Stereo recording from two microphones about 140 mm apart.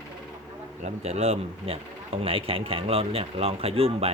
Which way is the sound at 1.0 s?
45° right (ahead or behind).